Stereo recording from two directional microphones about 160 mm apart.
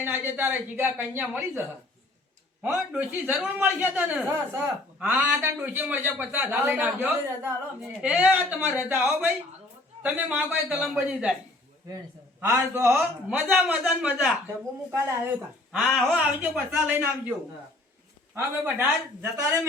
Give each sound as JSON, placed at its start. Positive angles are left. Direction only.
{"t": 0.0, "sound": "a man's voice", "side_deg": -10}
{"t": 2.6, "sound": "a man's voice", "side_deg": 0}
{"t": 12.4, "sound": "a man's voice", "side_deg": -15}
{"t": 15.7, "sound": "a man's voice", "side_deg": 0}
{"t": 18.3, "sound": "a man's voice", "side_deg": -15}